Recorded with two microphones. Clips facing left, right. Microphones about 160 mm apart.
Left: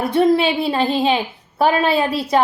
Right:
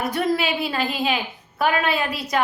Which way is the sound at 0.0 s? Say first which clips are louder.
Left 7 dB; 25° left (ahead or behind).